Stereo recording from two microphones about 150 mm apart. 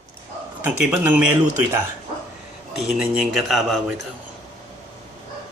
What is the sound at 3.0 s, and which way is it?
Speech, 5° right (ahead or behind).